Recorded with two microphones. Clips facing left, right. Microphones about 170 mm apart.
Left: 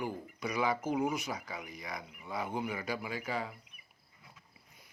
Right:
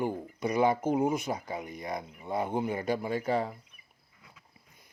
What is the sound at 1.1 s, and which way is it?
Speech, 50° right (ahead or behind).